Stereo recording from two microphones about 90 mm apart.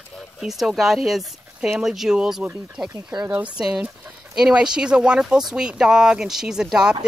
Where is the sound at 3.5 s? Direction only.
10° right (ahead or behind).